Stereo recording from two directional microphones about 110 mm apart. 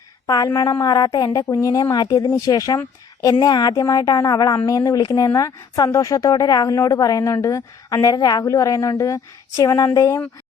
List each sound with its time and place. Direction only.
0.3 s speech: 35° left (ahead or behind)